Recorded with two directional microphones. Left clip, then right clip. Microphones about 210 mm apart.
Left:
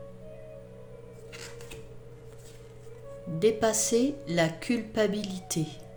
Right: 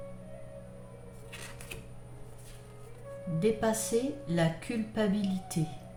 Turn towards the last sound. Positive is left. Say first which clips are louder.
# left 3 dB
turn(degrees=45)  # may be behind; listen again after turning